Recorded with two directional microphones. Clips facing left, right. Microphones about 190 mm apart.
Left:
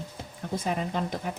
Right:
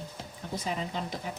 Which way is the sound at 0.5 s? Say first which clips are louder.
Left 4 dB; 50° left (ahead or behind).